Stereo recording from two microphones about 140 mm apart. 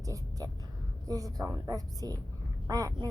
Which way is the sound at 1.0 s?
25° right (ahead or behind).